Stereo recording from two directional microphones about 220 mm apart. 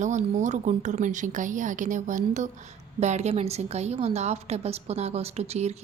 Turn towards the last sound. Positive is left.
turn(degrees=-30)  # may be behind; listen again after turning